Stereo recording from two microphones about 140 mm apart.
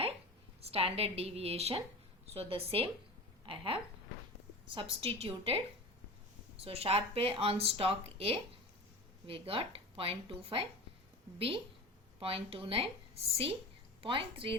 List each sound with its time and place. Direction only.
0.7 s a woman's voice: 45° right (ahead or behind)